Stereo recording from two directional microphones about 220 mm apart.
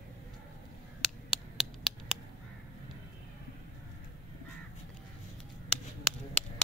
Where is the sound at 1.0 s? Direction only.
Centre (ahead or behind).